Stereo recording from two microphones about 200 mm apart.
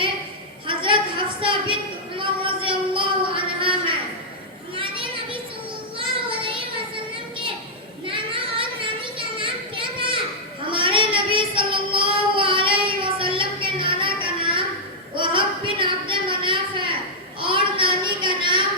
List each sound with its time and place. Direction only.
0.7 s a sound: 25° right (ahead or behind)
4.7 s children playing: 25° right (ahead or behind)
6.0 s child singing: 25° right (ahead or behind)
8.0 s children playing: 25° right (ahead or behind)
10.7 s child singing: 25° right (ahead or behind)
15.1 s a sound: 25° right (ahead or behind)